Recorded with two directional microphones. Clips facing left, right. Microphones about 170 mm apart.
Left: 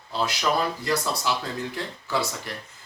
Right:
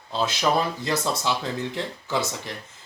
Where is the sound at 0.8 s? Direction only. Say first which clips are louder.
Right 1 dB; 20° right (ahead or behind).